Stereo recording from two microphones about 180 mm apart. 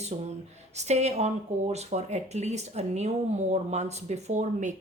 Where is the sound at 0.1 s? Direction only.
35° right (ahead or behind).